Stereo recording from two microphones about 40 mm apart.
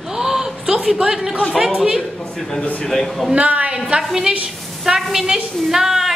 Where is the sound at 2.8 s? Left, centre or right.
Centre.